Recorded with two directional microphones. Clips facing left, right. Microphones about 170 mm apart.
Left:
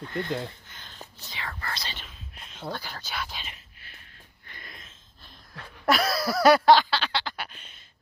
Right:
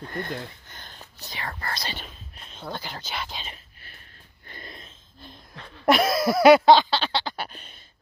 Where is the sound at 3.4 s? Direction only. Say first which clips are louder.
Right 3 dB; 40° right (ahead or behind).